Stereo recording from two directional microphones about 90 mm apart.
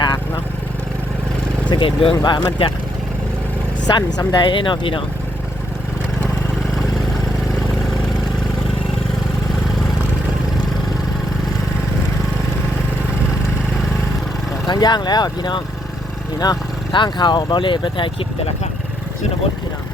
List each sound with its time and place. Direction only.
1.7 s speech: 85° left
2.2 s speech: 70° left (ahead or behind)
3.8 s speech: 50° left (ahead or behind)
4.4 s speech: 65° left (ahead or behind)
14.7 s speech: 50° left (ahead or behind)